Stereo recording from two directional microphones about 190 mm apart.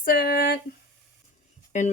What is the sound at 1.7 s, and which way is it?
Speech, 40° left (ahead or behind).